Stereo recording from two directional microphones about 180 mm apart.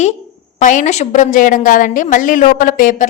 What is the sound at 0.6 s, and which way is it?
A woman's voice, 45° left (ahead or behind).